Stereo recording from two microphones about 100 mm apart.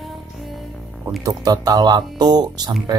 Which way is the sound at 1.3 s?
40° right (ahead or behind).